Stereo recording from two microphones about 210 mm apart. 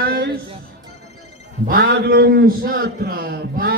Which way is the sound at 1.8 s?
50° right (ahead or behind).